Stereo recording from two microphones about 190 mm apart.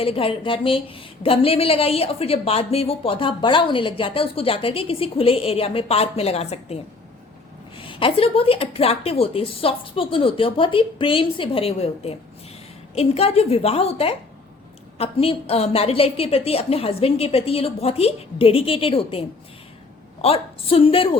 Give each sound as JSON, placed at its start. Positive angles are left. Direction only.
{"t": 0.0, "sound": "a woman's voice", "side_deg": 30}
{"t": 7.8, "sound": "a woman's voice", "side_deg": 25}
{"t": 20.2, "sound": "a woman's voice", "side_deg": 30}